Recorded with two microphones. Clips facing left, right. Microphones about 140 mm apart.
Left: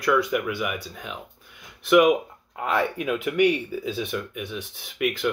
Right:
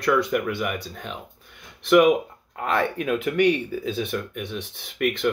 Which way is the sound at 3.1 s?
40° right (ahead or behind).